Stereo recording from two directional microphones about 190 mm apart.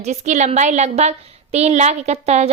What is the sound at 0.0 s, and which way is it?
A woman's voice, 40° right (ahead or behind).